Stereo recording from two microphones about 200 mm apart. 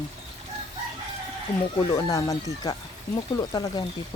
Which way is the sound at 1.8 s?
20° left (ahead or behind).